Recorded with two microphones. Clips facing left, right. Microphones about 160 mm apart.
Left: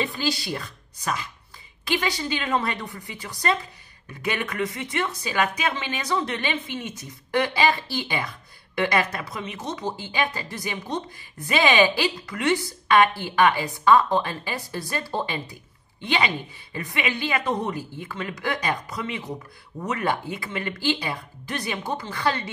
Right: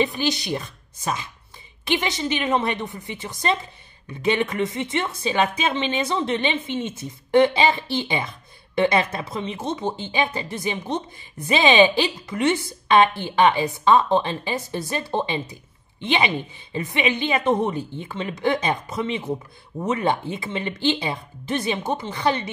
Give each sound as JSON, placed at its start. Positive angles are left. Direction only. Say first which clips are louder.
{"t": 0.0, "sound": "speech", "louder": "right 4 dB", "side_deg": -20}